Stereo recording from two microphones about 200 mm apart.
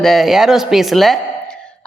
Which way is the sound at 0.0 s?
Centre (ahead or behind).